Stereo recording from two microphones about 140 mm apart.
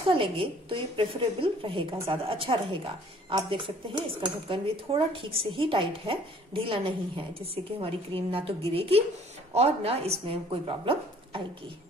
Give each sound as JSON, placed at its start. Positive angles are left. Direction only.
{"t": 0.0, "sound": "speech", "side_deg": -40}